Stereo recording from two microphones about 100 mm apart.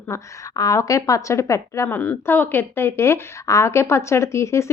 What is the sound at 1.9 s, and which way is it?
Speech, 20° left (ahead or behind).